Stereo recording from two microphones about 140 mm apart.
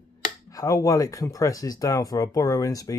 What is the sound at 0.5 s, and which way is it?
Speech, 25° left (ahead or behind).